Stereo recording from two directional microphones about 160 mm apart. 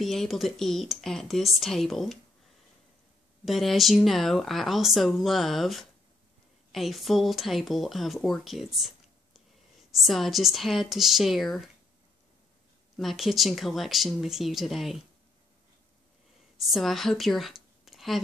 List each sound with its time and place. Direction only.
0.0 s speech: centre (ahead or behind)
3.4 s speech: centre (ahead or behind)
12.9 s speech: centre (ahead or behind)
16.7 s speech: centre (ahead or behind)